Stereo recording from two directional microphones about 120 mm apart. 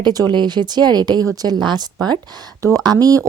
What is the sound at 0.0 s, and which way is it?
A woman's voice, 35° right (ahead or behind).